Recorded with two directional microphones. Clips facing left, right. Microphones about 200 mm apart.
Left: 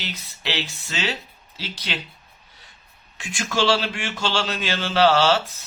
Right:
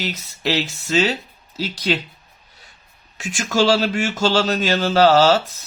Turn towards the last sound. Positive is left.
turn(degrees=-40)  # may be behind; listen again after turning